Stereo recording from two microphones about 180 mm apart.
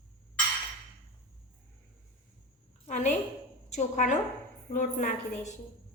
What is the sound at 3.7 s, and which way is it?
A woman's voice, 40° left (ahead or behind).